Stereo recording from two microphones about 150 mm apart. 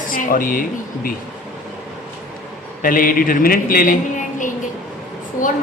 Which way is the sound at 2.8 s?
70° left (ahead or behind).